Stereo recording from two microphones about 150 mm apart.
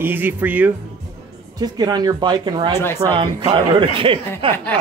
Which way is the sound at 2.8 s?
15° left (ahead or behind).